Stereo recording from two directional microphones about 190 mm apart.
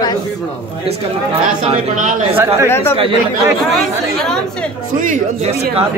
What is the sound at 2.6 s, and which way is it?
Speech, 10° left (ahead or behind).